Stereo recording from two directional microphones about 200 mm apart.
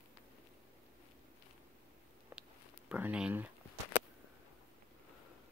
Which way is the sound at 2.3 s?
10° right (ahead or behind).